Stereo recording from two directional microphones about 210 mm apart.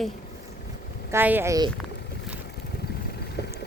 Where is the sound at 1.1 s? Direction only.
10° right (ahead or behind).